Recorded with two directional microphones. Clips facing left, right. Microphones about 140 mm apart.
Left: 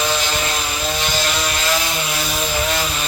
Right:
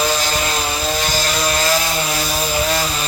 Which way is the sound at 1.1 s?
40° right (ahead or behind).